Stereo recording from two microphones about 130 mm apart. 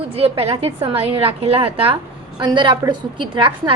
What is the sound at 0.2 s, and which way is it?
A woman's voice, 50° right (ahead or behind).